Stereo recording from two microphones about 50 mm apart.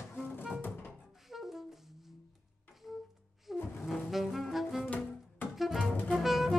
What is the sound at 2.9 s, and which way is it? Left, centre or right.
Music, centre.